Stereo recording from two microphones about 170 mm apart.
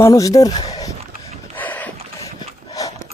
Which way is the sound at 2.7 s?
20° left (ahead or behind).